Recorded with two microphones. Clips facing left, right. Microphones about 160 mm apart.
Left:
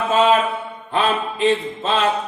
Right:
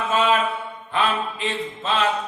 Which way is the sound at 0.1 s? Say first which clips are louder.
Left 5 dB; 30° left (ahead or behind).